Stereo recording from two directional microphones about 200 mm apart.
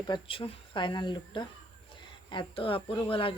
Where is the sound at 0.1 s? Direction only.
25° left (ahead or behind).